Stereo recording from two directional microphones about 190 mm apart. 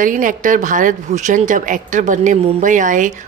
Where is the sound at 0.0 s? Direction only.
45° right (ahead or behind).